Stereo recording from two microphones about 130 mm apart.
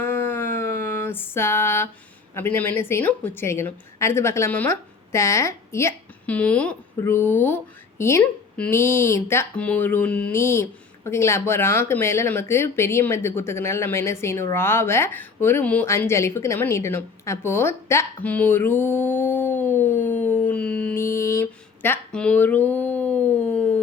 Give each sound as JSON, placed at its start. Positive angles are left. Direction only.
{"t": 0.0, "sound": "a sound", "side_deg": 15}
{"t": 2.3, "sound": "a woman's voice", "side_deg": 15}
{"t": 6.3, "sound": "speech", "side_deg": 10}
{"t": 8.2, "sound": "speech", "side_deg": 10}
{"t": 8.7, "sound": "a woman's voice", "side_deg": 20}
{"t": 21.0, "sound": "a sound", "side_deg": 20}